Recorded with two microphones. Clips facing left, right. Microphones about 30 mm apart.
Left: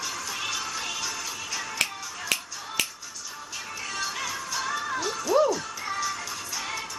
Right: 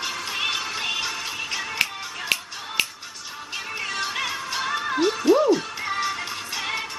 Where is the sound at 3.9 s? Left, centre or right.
Right.